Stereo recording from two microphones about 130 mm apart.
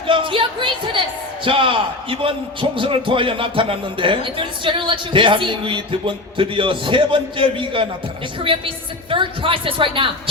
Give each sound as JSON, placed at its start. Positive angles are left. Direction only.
{"t": 0.1, "sound": "a man's voice", "side_deg": -40}